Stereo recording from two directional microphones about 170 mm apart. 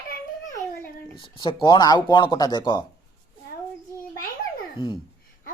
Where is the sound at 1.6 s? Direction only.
25° left (ahead or behind).